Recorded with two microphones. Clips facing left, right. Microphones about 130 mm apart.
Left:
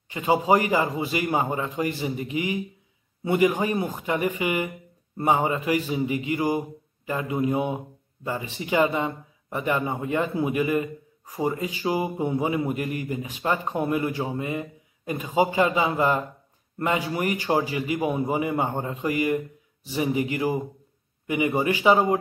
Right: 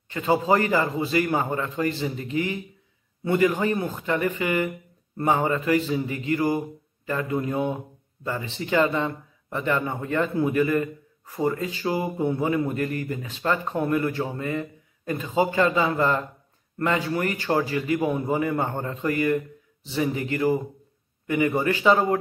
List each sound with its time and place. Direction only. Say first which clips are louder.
0.1 s speech: left 1 dB; 15° left (ahead or behind)